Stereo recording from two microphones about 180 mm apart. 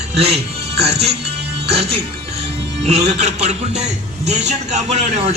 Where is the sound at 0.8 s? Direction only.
35° right (ahead or behind).